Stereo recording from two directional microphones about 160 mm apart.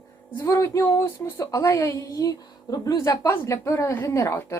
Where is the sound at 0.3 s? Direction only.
15° left (ahead or behind).